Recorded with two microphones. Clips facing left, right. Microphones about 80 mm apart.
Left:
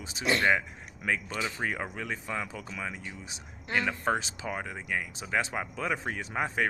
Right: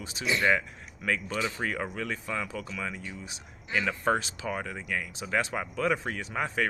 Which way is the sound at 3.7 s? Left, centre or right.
Centre.